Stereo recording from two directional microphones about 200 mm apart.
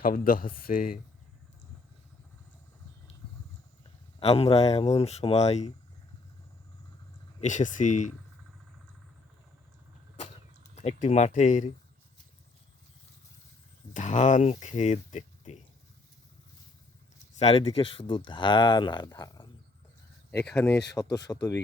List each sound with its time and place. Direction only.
0.0 s speech: 45° left (ahead or behind)
4.2 s speech: 30° left (ahead or behind)
7.4 s speech: 40° left (ahead or behind)
10.8 s speech: 35° left (ahead or behind)
13.9 s speech: 35° left (ahead or behind)
17.4 s speech: 30° left (ahead or behind)
20.5 s speech: 10° left (ahead or behind)